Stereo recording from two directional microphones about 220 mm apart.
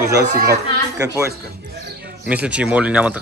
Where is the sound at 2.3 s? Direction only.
5° right (ahead or behind).